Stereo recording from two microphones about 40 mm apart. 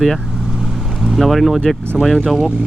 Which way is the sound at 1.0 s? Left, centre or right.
Centre.